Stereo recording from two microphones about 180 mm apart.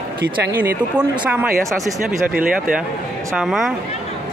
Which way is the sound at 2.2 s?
50° right (ahead or behind).